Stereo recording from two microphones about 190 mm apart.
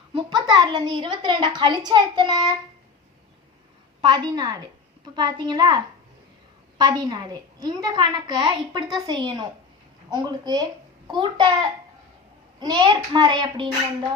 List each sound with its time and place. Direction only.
0.1 s a child's voice: 25° right (ahead or behind)
4.0 s a child's voice: 20° right (ahead or behind)
12.5 s a child's voice: 20° right (ahead or behind)